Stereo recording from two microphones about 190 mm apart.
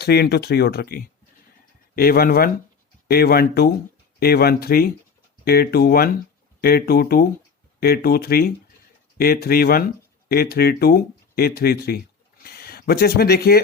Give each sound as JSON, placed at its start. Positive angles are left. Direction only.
{"t": 0.0, "sound": "speech", "side_deg": 60}